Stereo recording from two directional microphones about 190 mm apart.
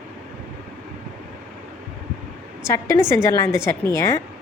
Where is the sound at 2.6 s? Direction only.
15° left (ahead or behind).